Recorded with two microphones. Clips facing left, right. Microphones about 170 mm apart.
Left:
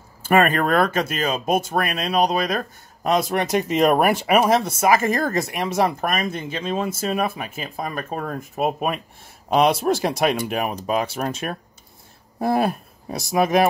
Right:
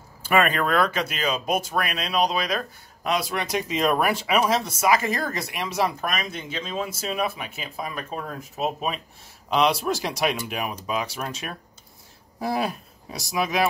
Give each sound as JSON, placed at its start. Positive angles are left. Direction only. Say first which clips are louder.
{"t": 0.2, "sound": "speech", "louder": "left 4 dB", "side_deg": 45}